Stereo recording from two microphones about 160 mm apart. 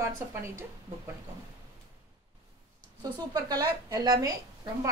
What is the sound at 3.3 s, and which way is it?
A woman's voice, 25° right (ahead or behind).